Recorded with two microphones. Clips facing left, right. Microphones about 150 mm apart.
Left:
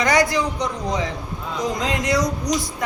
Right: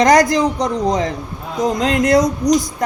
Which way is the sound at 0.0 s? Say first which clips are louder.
Right 7 dB; 40° right (ahead or behind).